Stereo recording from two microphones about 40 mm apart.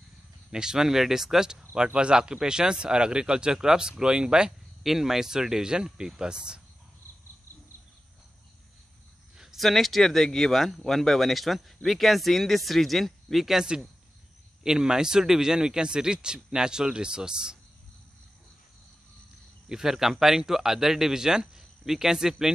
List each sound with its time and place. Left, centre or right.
0.5 s speech: centre
4.5 s speech: centre
9.6 s speech: centre
13.6 s speech: centre
19.7 s speech: centre